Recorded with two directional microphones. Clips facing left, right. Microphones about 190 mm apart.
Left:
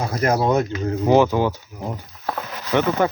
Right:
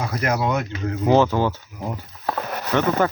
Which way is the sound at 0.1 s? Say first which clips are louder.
Left 5 dB; 30° left (ahead or behind).